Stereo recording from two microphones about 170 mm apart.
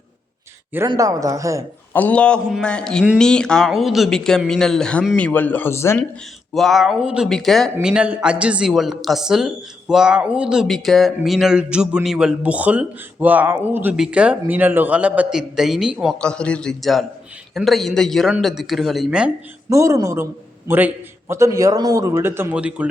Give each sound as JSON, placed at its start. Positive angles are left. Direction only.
{"t": 0.9, "sound": "a man's voice", "side_deg": -20}
{"t": 1.9, "sound": "speech", "side_deg": 10}
{"t": 6.5, "sound": "speech", "side_deg": 0}
{"t": 19.7, "sound": "a man's voice", "side_deg": -20}